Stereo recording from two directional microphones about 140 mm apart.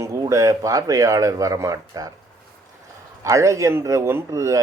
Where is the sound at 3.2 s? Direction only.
20° right (ahead or behind).